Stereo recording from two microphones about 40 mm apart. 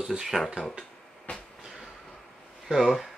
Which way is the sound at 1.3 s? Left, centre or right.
Left.